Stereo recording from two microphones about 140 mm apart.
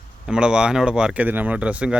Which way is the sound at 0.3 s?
5° right (ahead or behind).